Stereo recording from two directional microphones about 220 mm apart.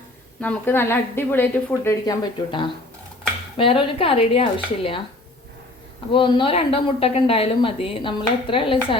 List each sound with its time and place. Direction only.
0.4 s a woman's voice: 10° left (ahead or behind); by 5.0 s 25° left (ahead or behind)
6.1 s speech: 20° left (ahead or behind)